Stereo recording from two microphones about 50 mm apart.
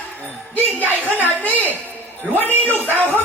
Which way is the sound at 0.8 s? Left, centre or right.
Right.